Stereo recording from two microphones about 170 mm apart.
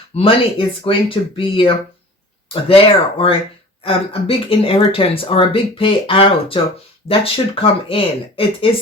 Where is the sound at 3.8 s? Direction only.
35° left (ahead or behind).